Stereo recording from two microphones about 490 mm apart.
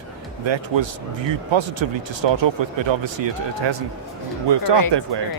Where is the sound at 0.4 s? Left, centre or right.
Right.